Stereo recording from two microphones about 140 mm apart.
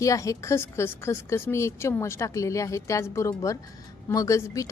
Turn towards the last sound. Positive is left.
turn(degrees=20)  # may be behind; listen again after turning